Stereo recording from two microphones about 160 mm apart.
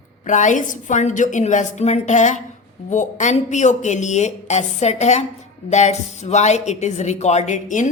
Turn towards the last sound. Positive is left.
turn(degrees=50)  # may be behind; listen again after turning